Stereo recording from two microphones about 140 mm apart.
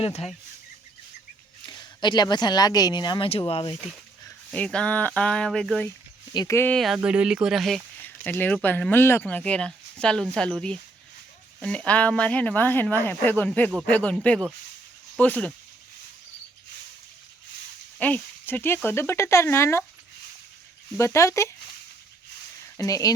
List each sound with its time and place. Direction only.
0.0 s speech: 45° left (ahead or behind)
1.6 s speech: 35° left (ahead or behind)
4.5 s speech: 5° left (ahead or behind)
6.3 s speech: 30° left (ahead or behind)
6.6 s speech: 5° left (ahead or behind)
8.2 s speech: 10° left (ahead or behind)
15.2 s speech: 10° left (ahead or behind)
18.0 s speech: 10° left (ahead or behind)
21.0 s speech: 20° left (ahead or behind)
22.8 s speech: 25° left (ahead or behind)